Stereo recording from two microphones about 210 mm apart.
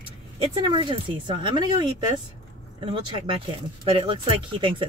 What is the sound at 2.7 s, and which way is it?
Speech, 25° right (ahead or behind).